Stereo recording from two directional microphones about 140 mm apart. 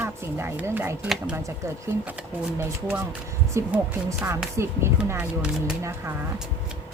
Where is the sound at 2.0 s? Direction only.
10° right (ahead or behind).